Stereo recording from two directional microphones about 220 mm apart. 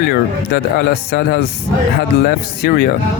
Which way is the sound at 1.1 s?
45° left (ahead or behind).